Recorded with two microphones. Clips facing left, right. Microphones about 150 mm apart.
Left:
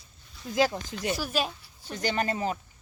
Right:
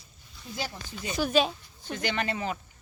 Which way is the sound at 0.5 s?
90° left.